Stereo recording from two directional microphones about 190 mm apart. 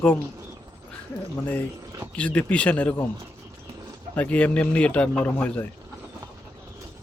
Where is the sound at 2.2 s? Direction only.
5° left (ahead or behind).